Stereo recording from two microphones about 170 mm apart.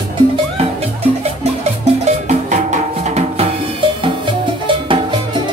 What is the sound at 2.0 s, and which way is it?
Music, 45° right (ahead or behind).